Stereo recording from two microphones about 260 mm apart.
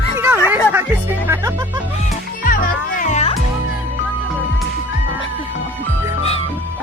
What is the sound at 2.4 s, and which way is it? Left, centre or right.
Music, left.